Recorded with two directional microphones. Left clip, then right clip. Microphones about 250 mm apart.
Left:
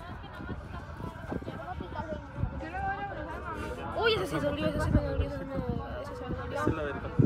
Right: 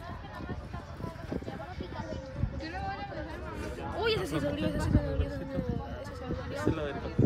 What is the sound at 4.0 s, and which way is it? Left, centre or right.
Speech, centre.